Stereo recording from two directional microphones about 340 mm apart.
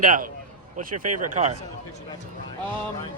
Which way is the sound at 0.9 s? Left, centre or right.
Right.